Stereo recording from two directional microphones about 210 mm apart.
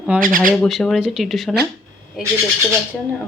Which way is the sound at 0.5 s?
Centre (ahead or behind).